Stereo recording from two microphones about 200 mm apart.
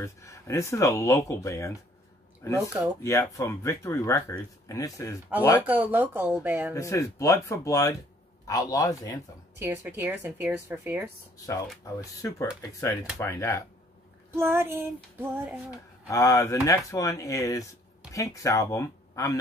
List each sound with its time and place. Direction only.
0.0 s speech: 15° left (ahead or behind)
5.7 s a woman's voice: 10° right (ahead or behind)
6.7 s speech: 15° left (ahead or behind)
9.6 s a woman's voice: 15° right (ahead or behind)
11.8 s speech: 15° left (ahead or behind)
14.3 s a woman's voice: 10° right (ahead or behind)
16.1 s speech: 15° left (ahead or behind)